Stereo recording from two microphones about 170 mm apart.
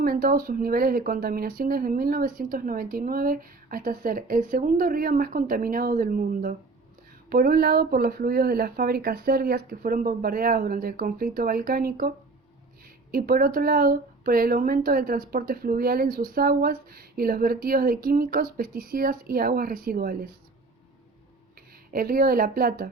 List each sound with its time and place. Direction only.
0.0 s speech: 60° right (ahead or behind)
21.9 s speech: 60° right (ahead or behind)